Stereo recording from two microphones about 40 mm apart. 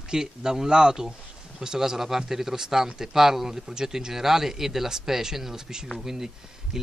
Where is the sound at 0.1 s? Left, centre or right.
Centre.